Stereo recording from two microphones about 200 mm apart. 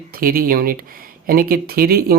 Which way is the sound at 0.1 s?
45° right (ahead or behind).